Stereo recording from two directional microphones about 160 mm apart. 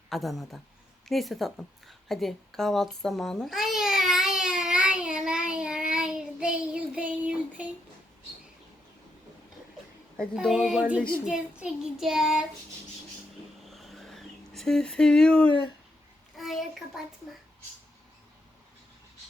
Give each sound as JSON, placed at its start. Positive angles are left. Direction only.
{"t": 0.1, "sound": "child singing", "side_deg": 0}
{"t": 2.0, "sound": "babbling", "side_deg": 0}
{"t": 10.2, "sound": "child singing", "side_deg": 0}
{"t": 13.7, "sound": "a sound", "side_deg": 0}
{"t": 15.4, "sound": "speech", "side_deg": 30}
{"t": 16.4, "sound": "a sound", "side_deg": 0}